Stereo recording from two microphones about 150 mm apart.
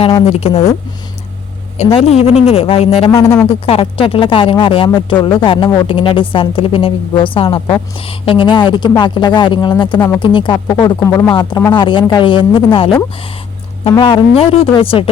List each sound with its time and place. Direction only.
0.0 s a woman's voice: 40° left (ahead or behind)
2.0 s speech: 40° left (ahead or behind)
3.1 s speech: 20° left (ahead or behind)
3.7 s a woman's voice: 35° left (ahead or behind); by 11.3 s 20° left (ahead or behind)
11.3 s a woman's voice: 30° left (ahead or behind)